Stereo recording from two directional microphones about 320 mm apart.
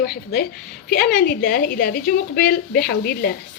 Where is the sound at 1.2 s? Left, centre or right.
Left.